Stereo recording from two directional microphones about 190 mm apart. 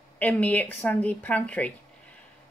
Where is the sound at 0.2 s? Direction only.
10° left (ahead or behind).